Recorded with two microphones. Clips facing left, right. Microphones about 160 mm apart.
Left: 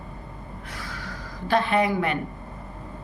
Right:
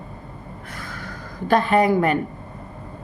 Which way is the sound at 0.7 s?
50° right (ahead or behind).